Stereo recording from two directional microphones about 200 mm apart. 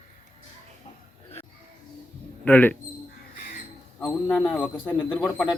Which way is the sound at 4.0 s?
Centre (ahead or behind).